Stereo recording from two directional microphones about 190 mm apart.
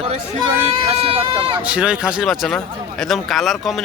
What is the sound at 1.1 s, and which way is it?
Speech, 30° right (ahead or behind).